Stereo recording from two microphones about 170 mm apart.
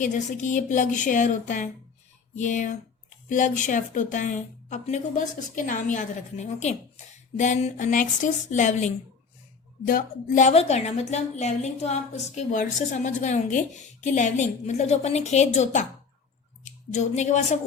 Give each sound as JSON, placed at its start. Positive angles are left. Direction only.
{"t": 0.0, "sound": "a woman's voice", "side_deg": 45}
{"t": 9.8, "sound": "a woman's voice", "side_deg": 55}